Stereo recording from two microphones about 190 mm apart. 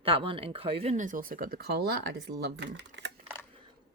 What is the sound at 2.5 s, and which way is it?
Speech, 65° right (ahead or behind).